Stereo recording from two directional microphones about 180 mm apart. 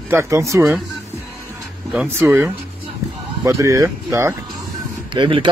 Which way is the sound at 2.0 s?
10° right (ahead or behind).